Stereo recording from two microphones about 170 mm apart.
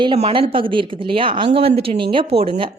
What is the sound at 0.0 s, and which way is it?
A woman's voice, 30° right (ahead or behind).